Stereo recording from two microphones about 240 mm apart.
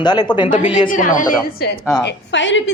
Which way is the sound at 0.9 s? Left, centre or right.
Left.